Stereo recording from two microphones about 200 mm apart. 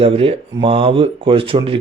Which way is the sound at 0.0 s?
30° right (ahead or behind).